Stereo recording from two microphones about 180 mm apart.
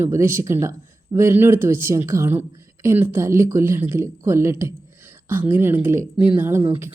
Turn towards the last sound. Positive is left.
turn(degrees=-15)  # may be behind; listen again after turning